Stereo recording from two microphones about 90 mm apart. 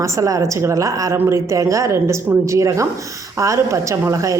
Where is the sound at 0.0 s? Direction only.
40° right (ahead or behind).